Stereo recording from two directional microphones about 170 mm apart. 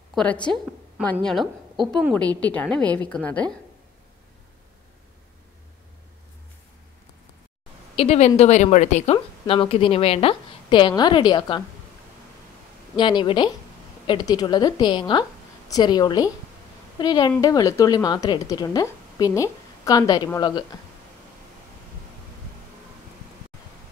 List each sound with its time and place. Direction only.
0.1 s a woman's voice: 5° left (ahead or behind)
7.9 s speech: 35° left (ahead or behind)
12.9 s a woman's voice: 25° left (ahead or behind)